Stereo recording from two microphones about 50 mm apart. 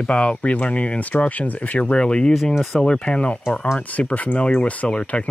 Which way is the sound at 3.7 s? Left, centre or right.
Left.